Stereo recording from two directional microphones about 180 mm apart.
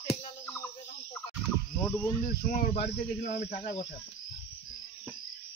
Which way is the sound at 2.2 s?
45° left (ahead or behind).